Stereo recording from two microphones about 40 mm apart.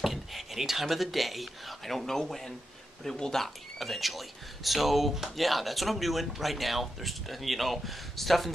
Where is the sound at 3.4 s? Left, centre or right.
Centre.